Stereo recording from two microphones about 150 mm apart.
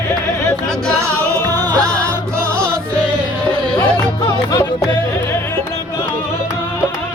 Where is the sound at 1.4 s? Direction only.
25° right (ahead or behind).